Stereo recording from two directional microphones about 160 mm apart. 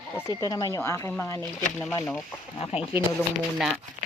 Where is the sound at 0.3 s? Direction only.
25° left (ahead or behind).